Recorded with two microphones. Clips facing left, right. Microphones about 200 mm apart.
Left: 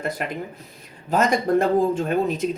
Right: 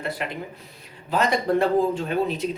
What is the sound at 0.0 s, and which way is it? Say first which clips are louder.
Speech: left 2 dB; 45° left (ahead or behind).